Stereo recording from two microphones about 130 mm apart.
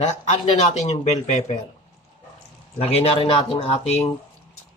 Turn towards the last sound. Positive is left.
turn(degrees=45)  # may be behind; listen again after turning